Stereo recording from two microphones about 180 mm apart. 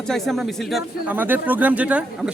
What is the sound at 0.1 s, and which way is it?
A man's voice, centre (ahead or behind).